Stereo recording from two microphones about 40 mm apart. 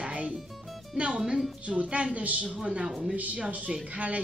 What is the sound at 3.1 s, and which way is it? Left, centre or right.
Speech, right.